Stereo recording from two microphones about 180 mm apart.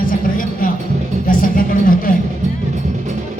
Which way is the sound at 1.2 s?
50° left (ahead or behind).